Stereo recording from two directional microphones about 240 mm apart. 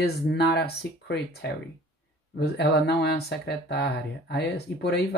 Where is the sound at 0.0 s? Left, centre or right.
Left.